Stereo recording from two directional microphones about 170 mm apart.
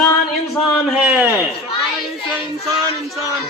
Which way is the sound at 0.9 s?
10° right (ahead or behind).